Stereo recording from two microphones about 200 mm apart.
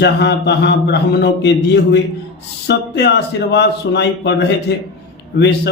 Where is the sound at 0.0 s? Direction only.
60° left (ahead or behind).